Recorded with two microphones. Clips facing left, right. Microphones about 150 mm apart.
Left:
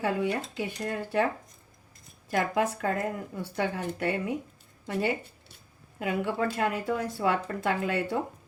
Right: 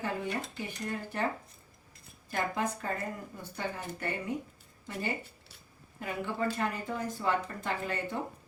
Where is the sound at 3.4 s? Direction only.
75° left (ahead or behind).